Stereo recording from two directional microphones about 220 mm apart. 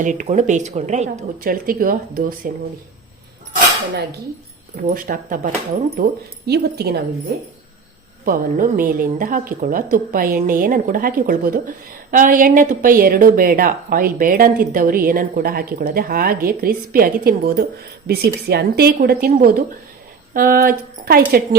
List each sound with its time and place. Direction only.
0.0 s a woman's voice: 35° right (ahead or behind)
4.8 s a woman's voice: 40° right (ahead or behind)
8.2 s a woman's voice: 40° right (ahead or behind)